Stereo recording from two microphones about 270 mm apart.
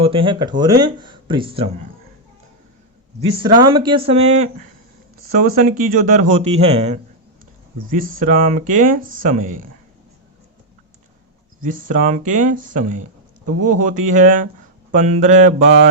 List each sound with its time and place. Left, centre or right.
0.0 s speech: centre
3.3 s speech: centre
11.6 s speech: right